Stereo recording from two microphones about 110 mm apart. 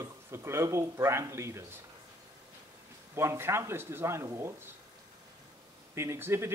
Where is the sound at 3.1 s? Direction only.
20° right (ahead or behind).